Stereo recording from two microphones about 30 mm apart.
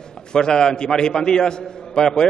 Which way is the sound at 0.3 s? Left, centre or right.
Left.